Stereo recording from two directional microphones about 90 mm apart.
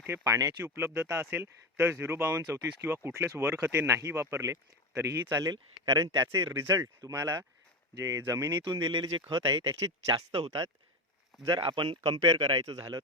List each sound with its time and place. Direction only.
0.1 s speech: 35° right (ahead or behind)
5.3 s speech: 45° right (ahead or behind)
8.6 s speech: 55° right (ahead or behind)
9.5 s speech: 35° right (ahead or behind)
11.4 s speech: 55° right (ahead or behind)